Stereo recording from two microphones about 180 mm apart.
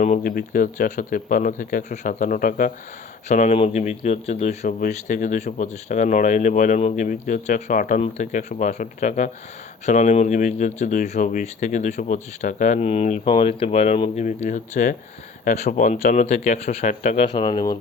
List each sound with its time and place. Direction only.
0.0 s speech: 45° left (ahead or behind)
17.2 s speech: 25° left (ahead or behind)